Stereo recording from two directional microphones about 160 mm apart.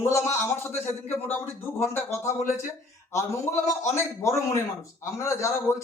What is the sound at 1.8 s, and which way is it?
Speech, 15° left (ahead or behind).